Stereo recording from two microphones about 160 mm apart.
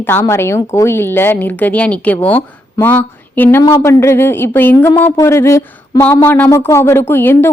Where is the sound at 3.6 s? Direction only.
20° left (ahead or behind).